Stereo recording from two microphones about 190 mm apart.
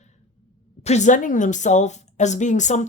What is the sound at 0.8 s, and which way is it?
Speech, 35° left (ahead or behind).